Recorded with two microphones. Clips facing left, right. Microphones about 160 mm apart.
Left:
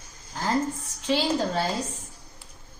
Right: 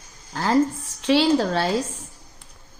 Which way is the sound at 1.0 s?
85° right.